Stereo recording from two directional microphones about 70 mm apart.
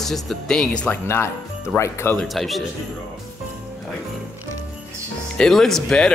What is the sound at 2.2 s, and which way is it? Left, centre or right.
Speech, centre.